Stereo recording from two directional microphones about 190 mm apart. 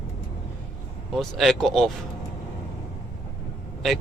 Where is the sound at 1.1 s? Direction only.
Centre (ahead or behind).